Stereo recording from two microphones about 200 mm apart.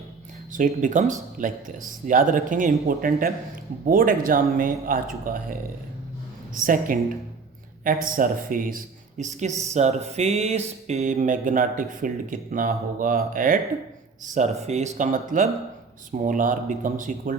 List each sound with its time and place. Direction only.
0.5 s mantra: 40° right (ahead or behind)
3.8 s a man's voice: 45° right (ahead or behind)
6.7 s a man's voice: 45° right (ahead or behind)
9.7 s mantra: 35° right (ahead or behind)